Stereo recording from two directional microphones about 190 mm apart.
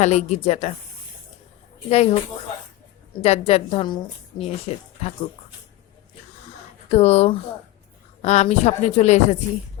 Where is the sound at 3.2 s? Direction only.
35° left (ahead or behind).